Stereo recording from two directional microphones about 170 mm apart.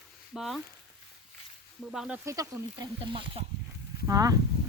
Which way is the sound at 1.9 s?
5° right (ahead or behind).